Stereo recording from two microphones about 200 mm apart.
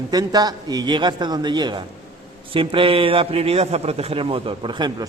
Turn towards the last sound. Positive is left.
turn(degrees=-25)  # may be behind; listen again after turning